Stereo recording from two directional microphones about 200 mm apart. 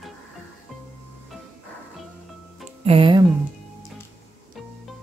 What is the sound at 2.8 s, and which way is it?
Speech, 25° right (ahead or behind).